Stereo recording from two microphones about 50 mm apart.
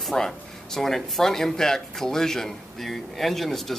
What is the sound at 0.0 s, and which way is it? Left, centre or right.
Speech, centre.